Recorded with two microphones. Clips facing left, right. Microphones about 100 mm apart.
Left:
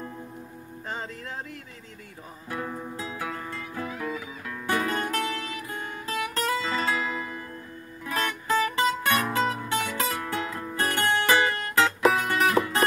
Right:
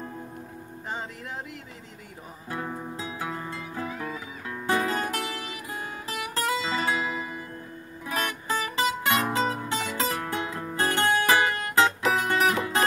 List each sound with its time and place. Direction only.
2.5 s guitar: 15° right (ahead or behind)
4.5 s music: 20° right (ahead or behind)